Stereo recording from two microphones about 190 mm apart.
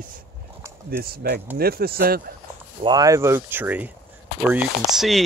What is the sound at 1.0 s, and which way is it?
Speech, 55° right (ahead or behind).